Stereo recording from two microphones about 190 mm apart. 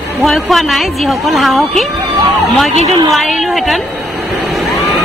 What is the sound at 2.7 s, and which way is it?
Speech, 35° right (ahead or behind).